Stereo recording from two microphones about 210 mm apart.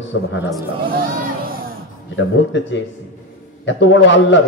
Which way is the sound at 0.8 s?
45° right (ahead or behind).